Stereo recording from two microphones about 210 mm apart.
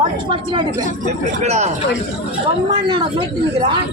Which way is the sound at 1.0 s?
35° right (ahead or behind).